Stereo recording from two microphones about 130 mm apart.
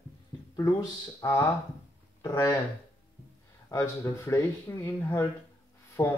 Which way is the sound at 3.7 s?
20° left (ahead or behind).